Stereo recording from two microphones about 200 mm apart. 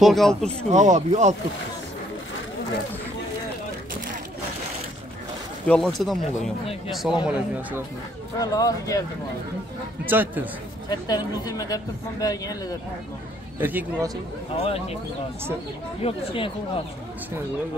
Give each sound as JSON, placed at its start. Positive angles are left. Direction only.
{"t": 0.0, "sound": "speech", "side_deg": 0}
{"t": 0.7, "sound": "speech", "side_deg": -35}
{"t": 5.7, "sound": "speech", "side_deg": 0}
{"t": 8.4, "sound": "speech", "side_deg": 20}
{"t": 10.0, "sound": "a man's voice", "side_deg": -10}
{"t": 10.9, "sound": "speech", "side_deg": 20}
{"t": 13.6, "sound": "a man's voice", "side_deg": -10}
{"t": 14.6, "sound": "speech", "side_deg": 30}
{"t": 16.0, "sound": "speech", "side_deg": 30}